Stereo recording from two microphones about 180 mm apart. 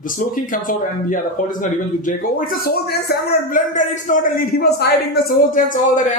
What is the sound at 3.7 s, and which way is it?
A man's voice, 45° left (ahead or behind).